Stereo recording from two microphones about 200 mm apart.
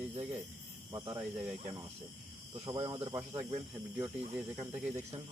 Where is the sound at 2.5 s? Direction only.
20° right (ahead or behind).